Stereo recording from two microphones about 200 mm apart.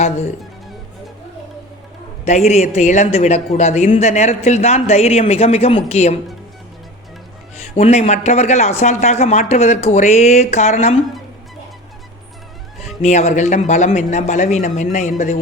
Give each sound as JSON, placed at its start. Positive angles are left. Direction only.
{"t": 2.2, "sound": "a man's voice", "side_deg": 35}
{"t": 7.8, "sound": "a man's voice", "side_deg": 35}
{"t": 13.0, "sound": "a man's voice", "side_deg": 35}